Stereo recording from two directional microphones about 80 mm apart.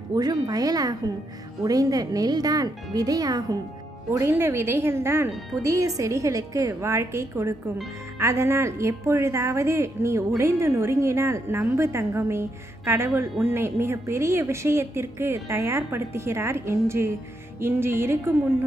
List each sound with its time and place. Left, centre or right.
0.1 s speech: right
4.1 s a woman's voice: right